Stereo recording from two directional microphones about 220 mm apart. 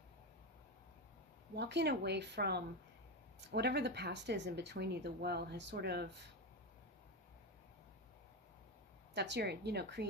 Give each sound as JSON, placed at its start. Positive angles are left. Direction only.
{"t": 1.5, "sound": "speech", "side_deg": -50}
{"t": 9.1, "sound": "speech", "side_deg": -50}